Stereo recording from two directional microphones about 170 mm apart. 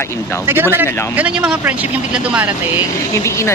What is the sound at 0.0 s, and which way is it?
Speech, 15° left (ahead or behind).